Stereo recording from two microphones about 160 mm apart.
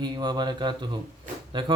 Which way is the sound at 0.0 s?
25° right (ahead or behind).